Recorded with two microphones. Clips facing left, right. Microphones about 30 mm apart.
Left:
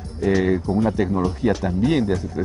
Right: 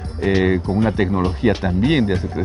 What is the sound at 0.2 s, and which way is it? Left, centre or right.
Speech, right.